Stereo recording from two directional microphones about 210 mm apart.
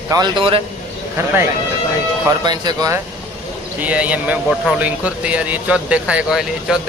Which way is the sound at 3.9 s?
5° right (ahead or behind).